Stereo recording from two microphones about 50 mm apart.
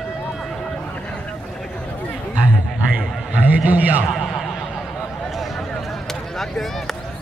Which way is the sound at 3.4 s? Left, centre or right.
Right.